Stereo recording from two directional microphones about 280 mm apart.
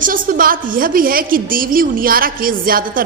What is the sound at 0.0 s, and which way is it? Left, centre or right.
A woman's voice, right.